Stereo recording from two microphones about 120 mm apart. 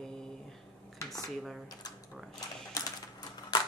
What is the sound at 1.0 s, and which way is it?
Dishes, 30° left (ahead or behind).